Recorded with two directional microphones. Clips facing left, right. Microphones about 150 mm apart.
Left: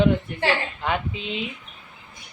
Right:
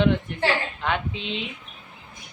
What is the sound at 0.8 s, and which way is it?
Speech, 5° left (ahead or behind).